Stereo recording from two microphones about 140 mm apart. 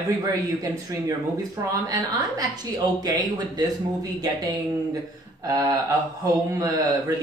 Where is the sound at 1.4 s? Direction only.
25° right (ahead or behind).